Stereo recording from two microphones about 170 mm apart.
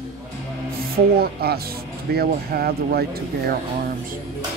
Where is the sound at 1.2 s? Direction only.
65° right (ahead or behind).